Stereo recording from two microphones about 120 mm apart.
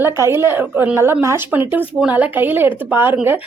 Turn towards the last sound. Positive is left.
turn(degrees=-15)  # may be behind; listen again after turning